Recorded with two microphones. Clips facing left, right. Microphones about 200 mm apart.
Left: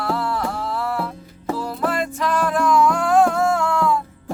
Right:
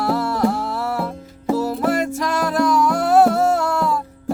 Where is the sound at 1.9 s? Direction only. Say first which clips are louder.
Right 3 dB; 40° right (ahead or behind).